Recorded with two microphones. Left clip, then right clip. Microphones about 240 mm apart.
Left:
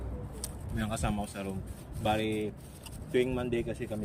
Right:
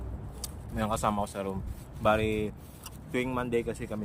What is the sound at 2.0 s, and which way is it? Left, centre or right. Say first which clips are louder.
Speech: right 4 dB; centre.